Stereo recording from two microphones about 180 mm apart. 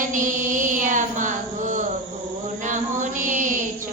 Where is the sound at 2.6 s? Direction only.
45° right (ahead or behind).